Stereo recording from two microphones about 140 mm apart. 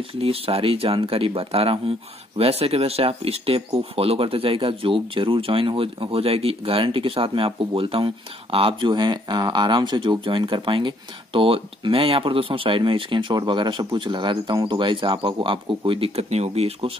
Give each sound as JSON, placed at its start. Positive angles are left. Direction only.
{"t": 0.2, "sound": "speech", "side_deg": -45}